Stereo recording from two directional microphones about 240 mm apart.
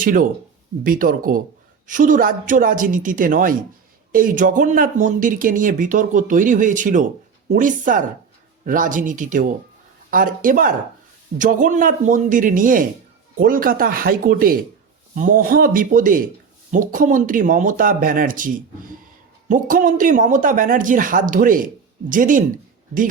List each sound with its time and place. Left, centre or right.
0.0 s speech: right